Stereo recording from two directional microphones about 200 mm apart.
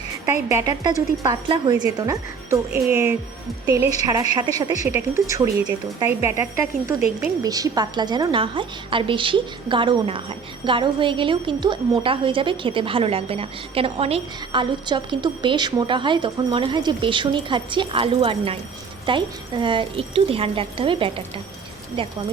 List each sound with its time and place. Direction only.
0.4 s a woman's voice: 15° right (ahead or behind)